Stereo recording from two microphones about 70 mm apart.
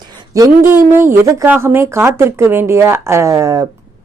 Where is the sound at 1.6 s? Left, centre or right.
Right.